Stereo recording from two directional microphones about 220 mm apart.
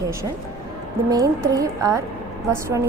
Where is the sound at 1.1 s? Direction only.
15° right (ahead or behind).